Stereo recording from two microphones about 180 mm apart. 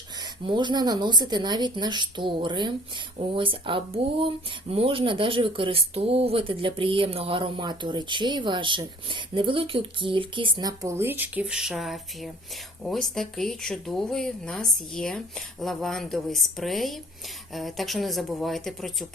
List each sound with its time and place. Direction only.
0.4 s speech: 25° right (ahead or behind); by 19.0 s centre (ahead or behind)